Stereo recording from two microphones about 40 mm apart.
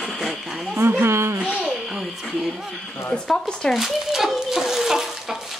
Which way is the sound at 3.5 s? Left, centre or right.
Centre.